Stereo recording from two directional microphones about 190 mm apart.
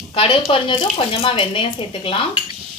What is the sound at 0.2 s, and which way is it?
A woman's voice, 25° left (ahead or behind).